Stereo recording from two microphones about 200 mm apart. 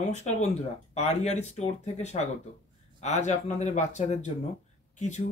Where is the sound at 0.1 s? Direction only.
35° left (ahead or behind).